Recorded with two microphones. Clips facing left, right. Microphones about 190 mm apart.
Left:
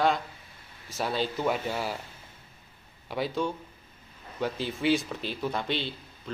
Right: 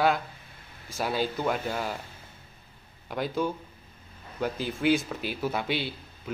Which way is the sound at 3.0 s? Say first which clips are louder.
Right 1 dB; centre (ahead or behind).